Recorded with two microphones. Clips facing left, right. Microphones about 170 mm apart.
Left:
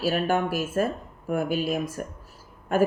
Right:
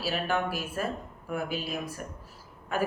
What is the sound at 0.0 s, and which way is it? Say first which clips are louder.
Speech: left 5 dB; 45° left (ahead or behind).